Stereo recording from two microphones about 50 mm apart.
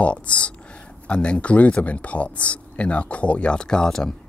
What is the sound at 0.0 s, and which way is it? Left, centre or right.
Speech, left.